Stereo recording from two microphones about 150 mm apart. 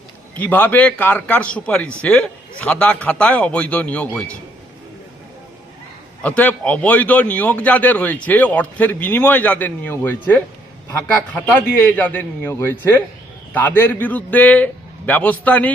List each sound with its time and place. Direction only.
0.3 s a man's voice: 10° left (ahead or behind)
6.2 s a man's voice: 10° left (ahead or behind)